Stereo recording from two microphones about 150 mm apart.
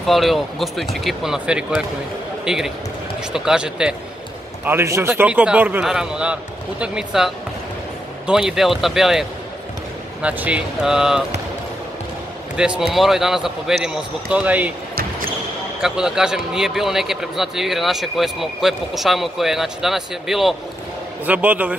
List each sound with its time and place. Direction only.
0.0 s speech: centre (ahead or behind)
4.6 s a man's voice: 15° right (ahead or behind)
10.2 s a man's voice: 10° right (ahead or behind)
12.5 s speech: 5° right (ahead or behind)
15.8 s a man's voice: 5° right (ahead or behind)